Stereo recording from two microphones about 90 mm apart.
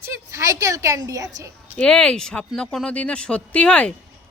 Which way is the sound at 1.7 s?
10° left (ahead or behind).